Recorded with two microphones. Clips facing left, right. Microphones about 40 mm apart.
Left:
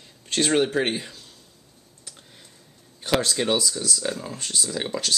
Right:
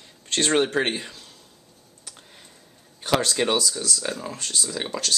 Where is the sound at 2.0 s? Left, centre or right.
Centre.